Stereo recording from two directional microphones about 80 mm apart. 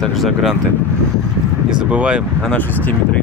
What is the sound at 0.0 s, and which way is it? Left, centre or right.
Speech, centre.